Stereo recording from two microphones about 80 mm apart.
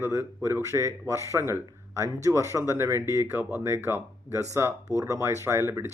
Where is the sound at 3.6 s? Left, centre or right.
Right.